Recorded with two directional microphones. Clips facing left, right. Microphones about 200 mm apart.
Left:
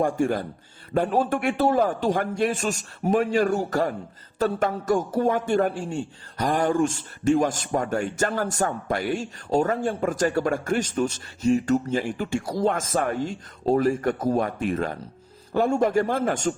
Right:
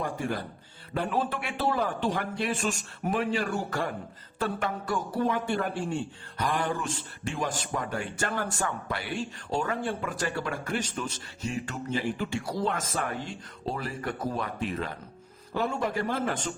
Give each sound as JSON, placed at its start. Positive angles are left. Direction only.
{"t": 0.0, "sound": "a man's voice", "side_deg": 45}